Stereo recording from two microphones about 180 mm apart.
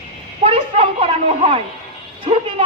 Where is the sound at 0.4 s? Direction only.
30° right (ahead or behind).